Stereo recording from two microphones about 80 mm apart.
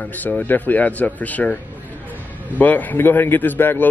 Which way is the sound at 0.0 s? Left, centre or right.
Centre.